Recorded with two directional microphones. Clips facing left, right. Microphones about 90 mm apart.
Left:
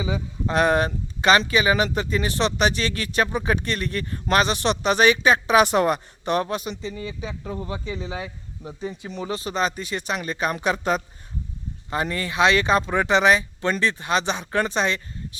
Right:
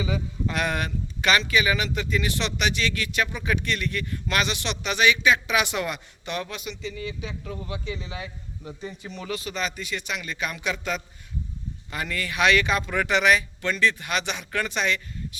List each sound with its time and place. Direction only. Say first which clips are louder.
0.0 s speech: left 1 dB; 30° left (ahead or behind)